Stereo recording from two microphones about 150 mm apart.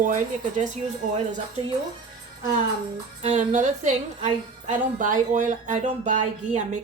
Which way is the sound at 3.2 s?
50° right (ahead or behind).